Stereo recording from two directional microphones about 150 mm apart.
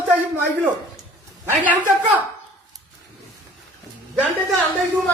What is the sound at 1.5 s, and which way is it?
Speech, 10° right (ahead or behind).